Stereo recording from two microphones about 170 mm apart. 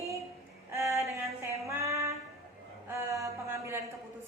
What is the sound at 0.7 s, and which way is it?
Female singing, 15° right (ahead or behind).